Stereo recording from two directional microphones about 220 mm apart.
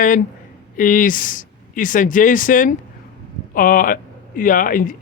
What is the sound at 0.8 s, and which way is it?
Speech, 35° left (ahead or behind).